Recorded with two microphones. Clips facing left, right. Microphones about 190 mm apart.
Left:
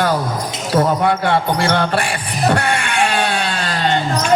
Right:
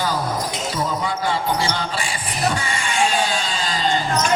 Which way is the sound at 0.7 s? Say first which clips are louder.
Left 12 dB; 65° left (ahead or behind).